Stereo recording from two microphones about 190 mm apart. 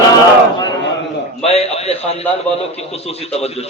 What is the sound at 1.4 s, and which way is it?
A man's voice, 35° left (ahead or behind).